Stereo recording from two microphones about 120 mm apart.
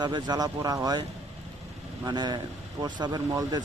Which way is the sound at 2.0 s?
35° right (ahead or behind).